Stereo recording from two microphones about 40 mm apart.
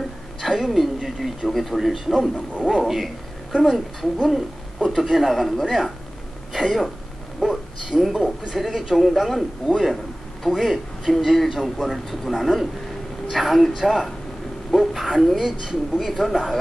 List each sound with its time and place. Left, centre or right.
0.4 s speech: centre
10.4 s speech: centre
15.4 s speech: centre